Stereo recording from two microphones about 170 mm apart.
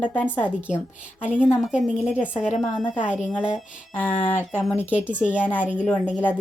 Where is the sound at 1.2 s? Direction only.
5° right (ahead or behind).